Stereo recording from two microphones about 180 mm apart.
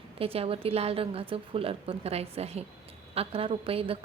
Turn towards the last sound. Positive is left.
turn(degrees=-30)  # may be behind; listen again after turning